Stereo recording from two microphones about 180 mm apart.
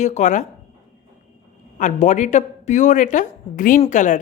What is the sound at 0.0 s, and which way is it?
Speech, 40° left (ahead or behind).